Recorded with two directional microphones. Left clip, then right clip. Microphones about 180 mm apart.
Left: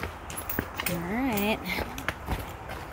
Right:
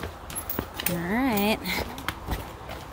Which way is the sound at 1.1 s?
20° right (ahead or behind).